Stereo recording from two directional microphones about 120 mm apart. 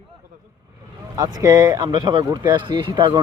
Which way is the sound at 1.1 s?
30° right (ahead or behind).